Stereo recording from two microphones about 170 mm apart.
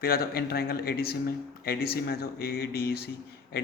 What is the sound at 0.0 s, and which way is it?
Speech, 65° left (ahead or behind).